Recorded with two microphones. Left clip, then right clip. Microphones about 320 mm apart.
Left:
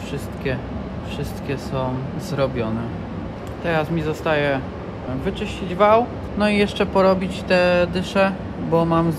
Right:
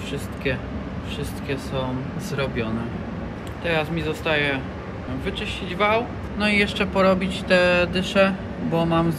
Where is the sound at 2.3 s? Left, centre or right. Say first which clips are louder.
Left 4 dB; centre.